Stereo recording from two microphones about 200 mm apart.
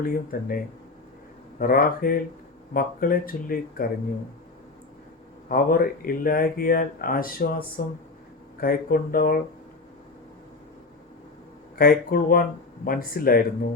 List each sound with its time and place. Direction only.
0.0 s speech: 45° left (ahead or behind)
5.5 s speech: 45° left (ahead or behind)
11.8 s speech: 45° left (ahead or behind)